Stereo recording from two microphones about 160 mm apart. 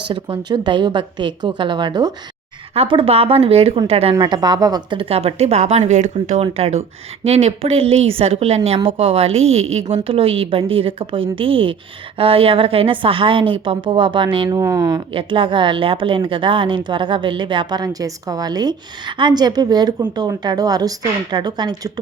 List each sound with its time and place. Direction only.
0.1 s a woman's voice: 30° right (ahead or behind)
4.1 s a woman's voice: 25° right (ahead or behind)